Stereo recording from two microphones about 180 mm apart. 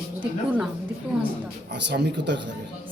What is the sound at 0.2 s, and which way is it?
Speech, 10° right (ahead or behind).